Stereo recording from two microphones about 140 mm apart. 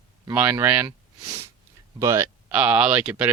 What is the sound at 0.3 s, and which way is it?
Speech, 10° right (ahead or behind).